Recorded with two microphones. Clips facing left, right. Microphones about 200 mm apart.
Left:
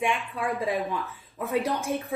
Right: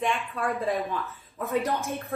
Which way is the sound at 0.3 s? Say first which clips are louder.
Even; 15° left (ahead or behind).